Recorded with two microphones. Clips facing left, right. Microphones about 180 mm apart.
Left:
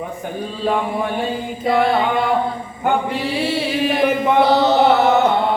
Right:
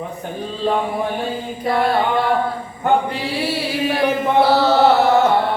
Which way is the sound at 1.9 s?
20° left (ahead or behind).